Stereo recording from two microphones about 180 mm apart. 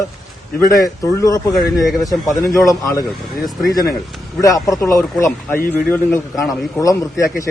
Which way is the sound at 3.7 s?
20° left (ahead or behind).